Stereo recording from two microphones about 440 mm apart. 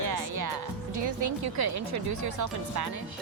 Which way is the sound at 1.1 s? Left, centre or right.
Right.